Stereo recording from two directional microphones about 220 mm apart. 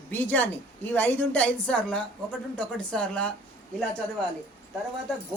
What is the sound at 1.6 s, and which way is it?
A woman's voice, 5° left (ahead or behind).